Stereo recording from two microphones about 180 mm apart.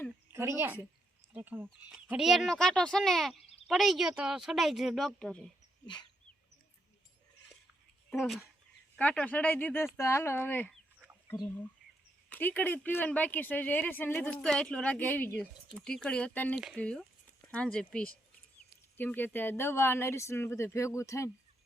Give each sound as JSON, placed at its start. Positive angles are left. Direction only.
{"t": 0.3, "sound": "a woman's voice", "side_deg": -15}
{"t": 5.8, "sound": "dog", "side_deg": 25}
{"t": 9.0, "sound": "speech", "side_deg": 10}
{"t": 12.3, "sound": "speech", "side_deg": 10}